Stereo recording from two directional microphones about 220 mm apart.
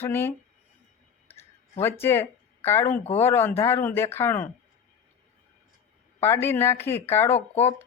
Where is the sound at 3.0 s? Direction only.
30° left (ahead or behind).